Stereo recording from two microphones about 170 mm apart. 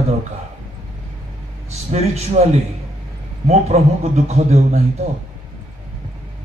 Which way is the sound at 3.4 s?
40° right (ahead or behind).